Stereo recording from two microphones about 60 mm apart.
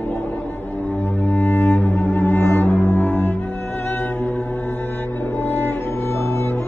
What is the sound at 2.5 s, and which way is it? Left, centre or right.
Music, left.